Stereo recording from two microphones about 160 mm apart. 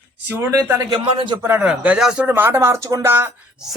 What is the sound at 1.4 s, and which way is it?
Speech, 10° right (ahead or behind).